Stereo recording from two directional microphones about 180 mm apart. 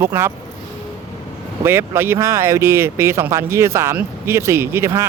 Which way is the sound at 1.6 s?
15° right (ahead or behind).